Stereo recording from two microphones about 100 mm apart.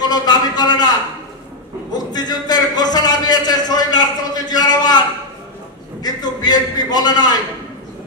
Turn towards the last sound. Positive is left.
turn(degrees=40)  # may be behind; listen again after turning